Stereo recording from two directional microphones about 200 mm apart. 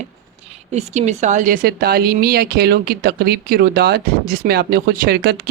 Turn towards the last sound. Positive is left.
turn(degrees=-55)  # may be behind; listen again after turning